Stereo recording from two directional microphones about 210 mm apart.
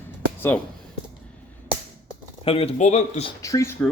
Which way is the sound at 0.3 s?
10° left (ahead or behind).